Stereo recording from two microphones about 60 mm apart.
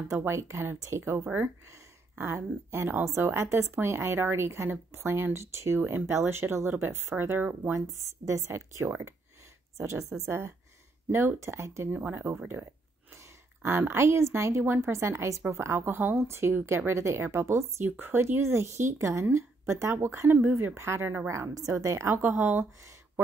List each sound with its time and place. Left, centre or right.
0.1 s speech: right
7.9 s speech: right
10.2 s speech: right
11.1 s speech: right
11.3 s speech: right
11.9 s speech: right
13.1 s speech: right
17.8 s speech: right
20.2 s speech: right
21.3 s speech: right
22.1 s speech: right